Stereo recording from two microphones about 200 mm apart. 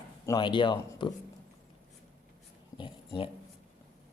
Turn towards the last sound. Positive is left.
turn(degrees=25)  # may be behind; listen again after turning